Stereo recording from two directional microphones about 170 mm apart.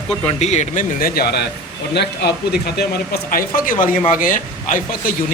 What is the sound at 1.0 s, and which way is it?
Speech, 65° left (ahead or behind).